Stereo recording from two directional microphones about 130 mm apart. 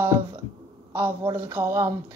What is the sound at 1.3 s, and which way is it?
Speech, 20° right (ahead or behind).